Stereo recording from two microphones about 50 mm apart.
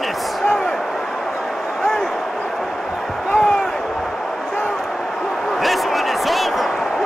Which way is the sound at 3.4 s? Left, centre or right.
Centre.